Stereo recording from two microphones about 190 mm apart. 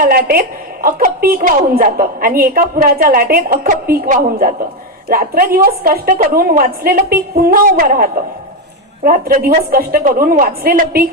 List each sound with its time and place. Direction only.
0.0 s a woman's voice: 50° right (ahead or behind)